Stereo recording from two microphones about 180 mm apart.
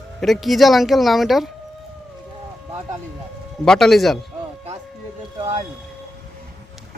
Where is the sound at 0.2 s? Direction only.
Centre (ahead or behind).